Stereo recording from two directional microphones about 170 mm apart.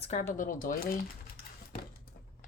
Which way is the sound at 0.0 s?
40° left (ahead or behind).